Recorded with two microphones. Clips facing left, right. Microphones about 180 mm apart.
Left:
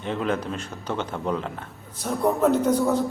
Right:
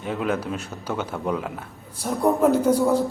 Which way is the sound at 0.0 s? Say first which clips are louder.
Right 1 dB; 10° right (ahead or behind).